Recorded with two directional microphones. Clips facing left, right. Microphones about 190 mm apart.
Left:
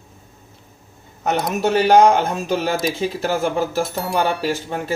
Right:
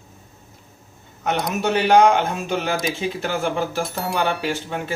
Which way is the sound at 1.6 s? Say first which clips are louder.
Left 2 dB; 40° left (ahead or behind).